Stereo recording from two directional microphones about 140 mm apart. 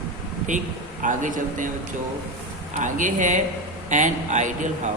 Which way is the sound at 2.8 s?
65° right (ahead or behind).